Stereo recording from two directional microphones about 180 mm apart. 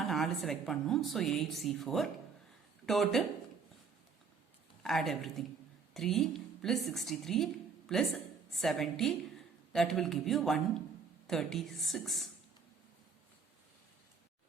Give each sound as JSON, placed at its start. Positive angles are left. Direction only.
{"t": 0.0, "sound": "speech", "side_deg": 0}
{"t": 4.8, "sound": "a woman's voice", "side_deg": 0}